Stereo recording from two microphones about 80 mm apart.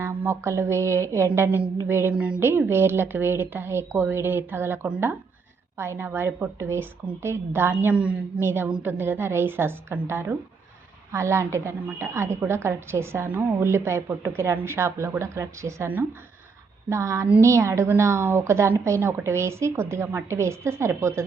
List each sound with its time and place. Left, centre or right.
0.0 s a sound: right
0.4 s a woman's voice: right
2.1 s speech: centre
2.4 s a woman's voice: right
8.4 s a woman's voice: right
16.9 s a woman's voice: right